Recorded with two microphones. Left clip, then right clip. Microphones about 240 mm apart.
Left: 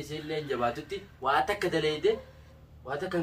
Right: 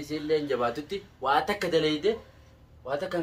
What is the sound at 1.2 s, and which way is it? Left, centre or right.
A man's voice, right.